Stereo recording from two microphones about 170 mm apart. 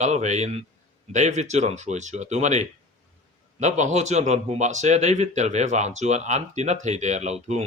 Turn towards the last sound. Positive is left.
turn(degrees=-40)  # may be behind; listen again after turning